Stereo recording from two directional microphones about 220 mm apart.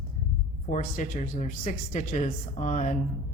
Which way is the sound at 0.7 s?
35° left (ahead or behind).